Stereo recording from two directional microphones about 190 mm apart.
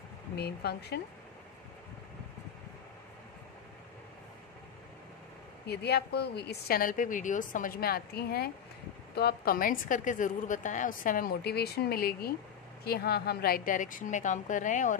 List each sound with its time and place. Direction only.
0.4 s a woman's voice: 55° left (ahead or behind)
5.7 s a woman's voice: 60° left (ahead or behind); by 15.0 s 40° left (ahead or behind)